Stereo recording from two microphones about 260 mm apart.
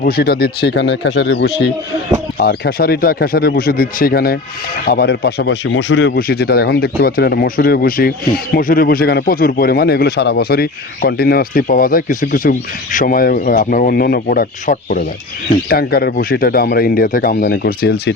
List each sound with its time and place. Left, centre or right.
0.0 s a man's voice: left